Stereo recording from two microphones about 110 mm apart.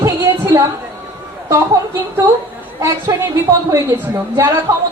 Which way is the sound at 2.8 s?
25° right (ahead or behind).